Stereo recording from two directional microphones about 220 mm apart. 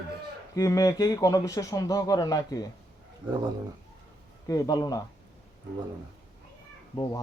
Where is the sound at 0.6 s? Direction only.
15° left (ahead or behind).